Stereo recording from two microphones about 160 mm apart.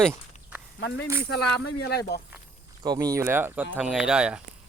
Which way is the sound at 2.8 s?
25° right (ahead or behind).